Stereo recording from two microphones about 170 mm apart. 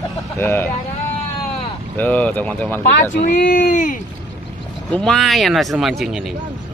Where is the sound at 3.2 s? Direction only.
50° left (ahead or behind).